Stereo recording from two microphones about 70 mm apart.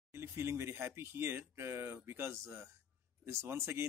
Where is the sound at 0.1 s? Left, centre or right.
Right.